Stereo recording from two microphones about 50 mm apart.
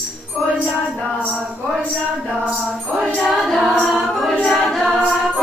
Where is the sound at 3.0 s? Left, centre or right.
Centre.